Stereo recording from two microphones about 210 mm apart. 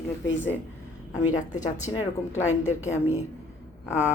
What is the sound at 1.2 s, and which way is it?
Speech, 35° left (ahead or behind).